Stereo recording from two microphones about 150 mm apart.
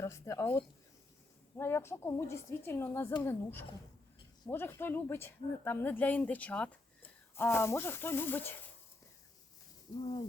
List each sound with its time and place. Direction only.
0.0 s speech: 20° left (ahead or behind)
1.5 s speech: 15° left (ahead or behind)